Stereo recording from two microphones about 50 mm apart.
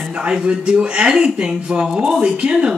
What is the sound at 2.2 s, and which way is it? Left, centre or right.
Speech, centre.